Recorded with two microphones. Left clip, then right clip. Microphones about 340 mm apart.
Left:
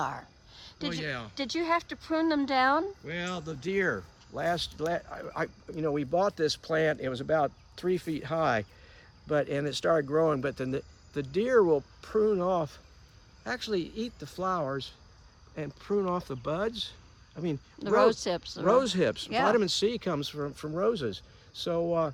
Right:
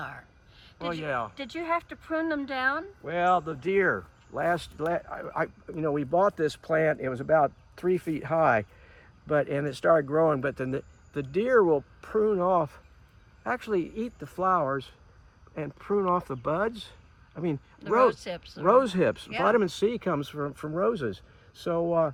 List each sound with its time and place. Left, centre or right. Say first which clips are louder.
0.0 s a sound: left 6 dB; centre
1.0 s speech: right 6 dB; centre
1.4 s speech: left 1 dB; centre
3.1 s speech: right 11 dB; centre
3.4 s speech: right 4 dB; centre
14.2 s speech: right 6 dB; centre
17.7 s speech: right 1 dB; centre
18.6 s speech: right 3 dB; centre